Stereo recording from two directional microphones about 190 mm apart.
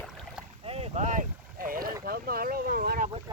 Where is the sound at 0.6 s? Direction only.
30° right (ahead or behind); by 1.9 s 50° right (ahead or behind).